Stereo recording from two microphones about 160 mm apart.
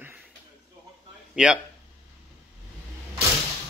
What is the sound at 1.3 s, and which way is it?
Speech, 5° right (ahead or behind).